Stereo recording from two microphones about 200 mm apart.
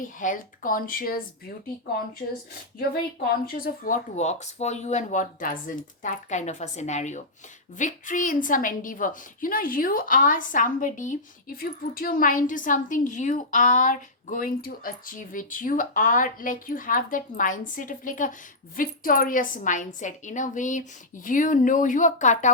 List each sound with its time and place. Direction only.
0.2 s speech: 40° left (ahead or behind)
3.4 s a woman's voice: 45° left (ahead or behind)